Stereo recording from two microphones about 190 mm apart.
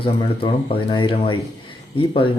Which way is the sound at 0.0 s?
30° left (ahead or behind).